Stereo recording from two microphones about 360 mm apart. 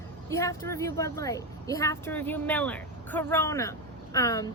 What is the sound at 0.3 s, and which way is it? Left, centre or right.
Speech, centre.